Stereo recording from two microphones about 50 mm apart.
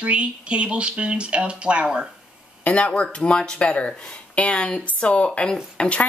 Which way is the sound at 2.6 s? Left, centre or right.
Left.